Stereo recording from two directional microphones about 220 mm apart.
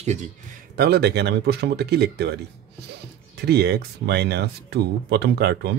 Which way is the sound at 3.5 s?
45° right (ahead or behind).